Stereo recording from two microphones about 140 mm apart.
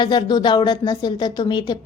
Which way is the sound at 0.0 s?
30° left (ahead or behind).